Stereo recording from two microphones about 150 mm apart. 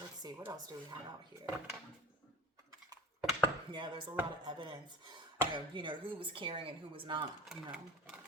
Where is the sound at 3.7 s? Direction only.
30° right (ahead or behind).